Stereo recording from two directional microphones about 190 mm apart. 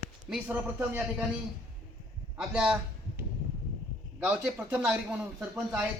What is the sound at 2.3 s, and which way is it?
Speech, 5° right (ahead or behind).